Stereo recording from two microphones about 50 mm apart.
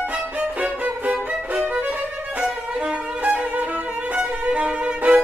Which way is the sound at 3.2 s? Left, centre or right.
Right.